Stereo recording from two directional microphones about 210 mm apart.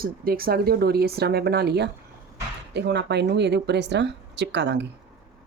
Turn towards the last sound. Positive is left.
turn(degrees=-55)  # may be behind; listen again after turning